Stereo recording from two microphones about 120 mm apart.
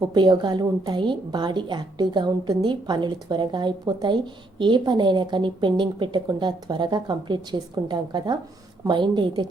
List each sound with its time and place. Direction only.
0.1 s a woman's voice: 35° right (ahead or behind)